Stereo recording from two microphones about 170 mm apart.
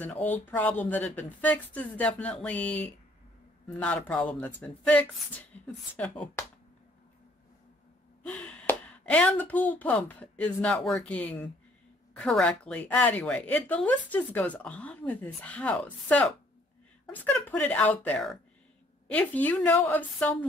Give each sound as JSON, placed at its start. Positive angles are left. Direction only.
{"t": 0.0, "sound": "a woman's voice", "side_deg": 10}
{"t": 8.3, "sound": "a woman's voice", "side_deg": 5}